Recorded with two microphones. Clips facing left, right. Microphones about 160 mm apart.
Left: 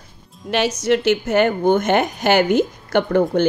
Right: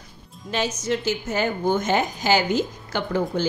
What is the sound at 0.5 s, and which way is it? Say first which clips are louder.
A woman's voice: left 7 dB; 75° left (ahead or behind).